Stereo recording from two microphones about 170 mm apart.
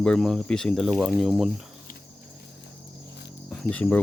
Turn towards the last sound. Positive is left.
turn(degrees=10)  # may be behind; listen again after turning